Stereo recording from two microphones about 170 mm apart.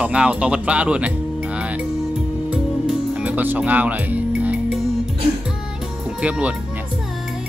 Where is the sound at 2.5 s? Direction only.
5° right (ahead or behind).